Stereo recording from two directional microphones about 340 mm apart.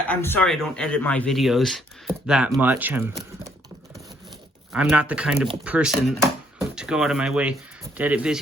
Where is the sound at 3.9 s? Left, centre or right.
Centre.